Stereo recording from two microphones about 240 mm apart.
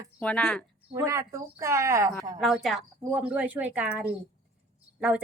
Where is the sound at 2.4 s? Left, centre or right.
Centre.